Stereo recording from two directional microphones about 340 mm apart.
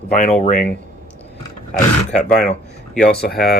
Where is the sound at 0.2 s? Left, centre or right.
Centre.